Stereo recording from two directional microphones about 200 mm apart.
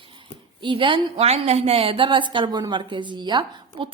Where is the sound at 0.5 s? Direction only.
25° right (ahead or behind).